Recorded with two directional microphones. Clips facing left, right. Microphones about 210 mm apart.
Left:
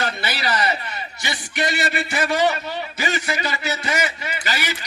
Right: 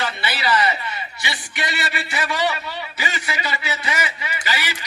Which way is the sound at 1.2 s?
45° left (ahead or behind).